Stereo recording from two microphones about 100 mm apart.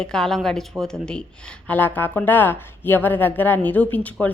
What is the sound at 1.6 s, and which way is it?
A woman's voice, 15° left (ahead or behind).